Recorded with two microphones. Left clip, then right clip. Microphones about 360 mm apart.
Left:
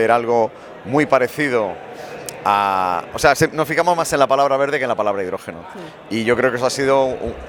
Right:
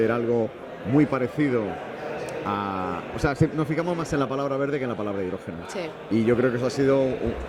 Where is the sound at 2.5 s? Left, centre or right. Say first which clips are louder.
Left 14 dB; left.